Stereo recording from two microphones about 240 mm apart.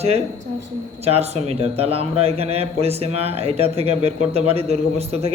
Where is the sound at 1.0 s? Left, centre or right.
Right.